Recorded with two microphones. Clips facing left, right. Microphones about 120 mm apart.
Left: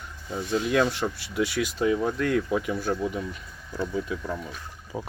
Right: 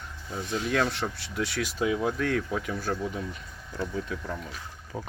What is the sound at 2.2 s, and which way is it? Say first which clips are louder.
Speech: left 4 dB; 5° left (ahead or behind).